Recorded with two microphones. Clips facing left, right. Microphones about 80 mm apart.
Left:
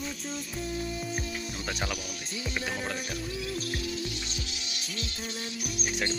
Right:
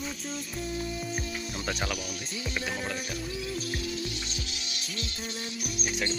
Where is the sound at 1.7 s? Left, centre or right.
Centre.